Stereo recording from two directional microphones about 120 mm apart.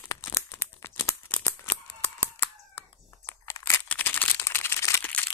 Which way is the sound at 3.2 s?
30° left (ahead or behind).